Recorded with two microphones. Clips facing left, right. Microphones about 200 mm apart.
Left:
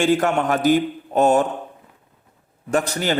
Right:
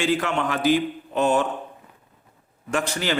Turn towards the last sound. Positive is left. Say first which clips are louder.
# left 4 dB
turn(degrees=40)  # may be behind; listen again after turning